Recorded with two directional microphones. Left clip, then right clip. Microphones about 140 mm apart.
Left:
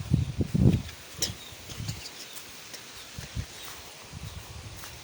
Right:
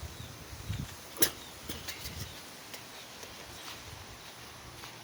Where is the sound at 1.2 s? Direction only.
60° right (ahead or behind).